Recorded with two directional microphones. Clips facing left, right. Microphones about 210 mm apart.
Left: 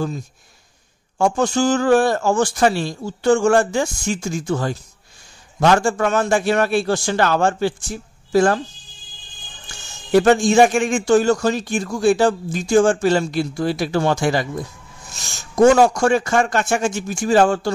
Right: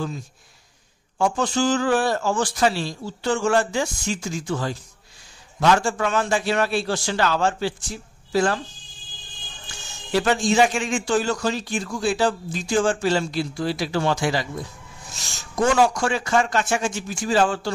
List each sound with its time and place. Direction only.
1.1 s a man's voice: 45° left (ahead or behind)
10.1 s a man's voice: 50° left (ahead or behind)
15.5 s a man's voice: 45° left (ahead or behind)